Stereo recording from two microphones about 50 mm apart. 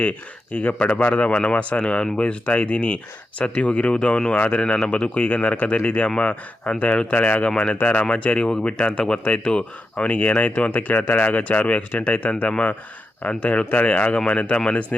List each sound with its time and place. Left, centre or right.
0.0 s a man's voice: left
7.8 s a man's voice: left